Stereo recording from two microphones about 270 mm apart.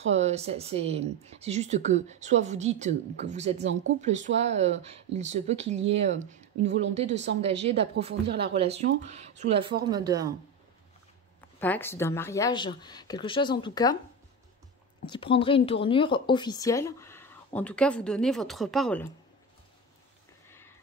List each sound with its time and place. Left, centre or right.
0.0 s speech: right
11.6 s speech: centre
15.0 s speech: centre
20.4 s a sound: centre